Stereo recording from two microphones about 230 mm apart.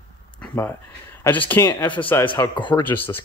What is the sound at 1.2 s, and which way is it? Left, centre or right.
Speech, centre.